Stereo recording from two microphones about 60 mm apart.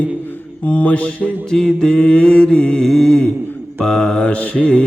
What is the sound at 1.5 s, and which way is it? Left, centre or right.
Mantra, centre.